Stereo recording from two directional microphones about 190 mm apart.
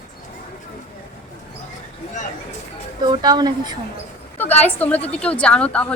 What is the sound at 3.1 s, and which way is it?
Speech, 20° right (ahead or behind).